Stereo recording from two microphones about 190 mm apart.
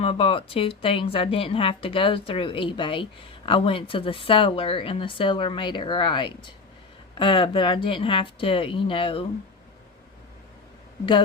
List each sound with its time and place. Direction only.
0.0 s a woman's voice: 30° left (ahead or behind)